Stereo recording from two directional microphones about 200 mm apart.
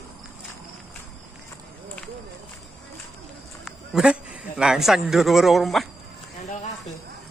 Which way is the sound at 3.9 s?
5° right (ahead or behind).